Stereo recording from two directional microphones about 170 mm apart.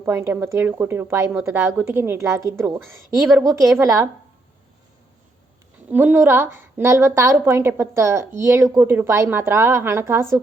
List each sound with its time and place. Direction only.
0.0 s a woman's voice: 15° right (ahead or behind)
5.9 s a woman's voice: 10° right (ahead or behind)